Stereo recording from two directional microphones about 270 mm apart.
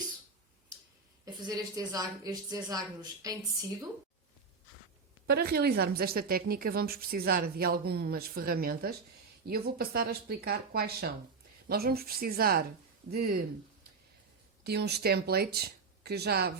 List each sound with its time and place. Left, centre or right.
1.2 s a woman's voice: centre
5.2 s a woman's voice: right
14.6 s speech: right